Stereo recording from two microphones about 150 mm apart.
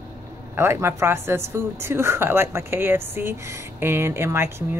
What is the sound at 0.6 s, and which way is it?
Speech, 15° right (ahead or behind).